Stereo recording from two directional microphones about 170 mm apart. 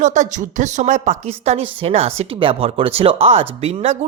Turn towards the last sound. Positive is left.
turn(degrees=-40)  # may be behind; listen again after turning